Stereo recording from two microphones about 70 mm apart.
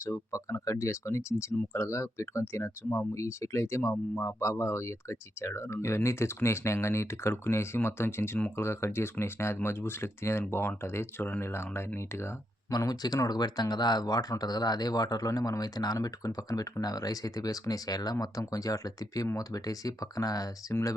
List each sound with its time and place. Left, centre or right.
0.0 s speech: left
12.7 s speech: left